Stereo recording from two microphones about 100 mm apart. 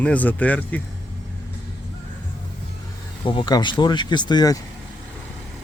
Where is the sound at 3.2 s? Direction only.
55° left (ahead or behind); by 4.6 s 40° left (ahead or behind).